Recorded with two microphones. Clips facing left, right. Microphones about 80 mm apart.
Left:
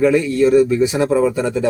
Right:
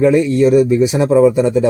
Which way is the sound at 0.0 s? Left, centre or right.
Right.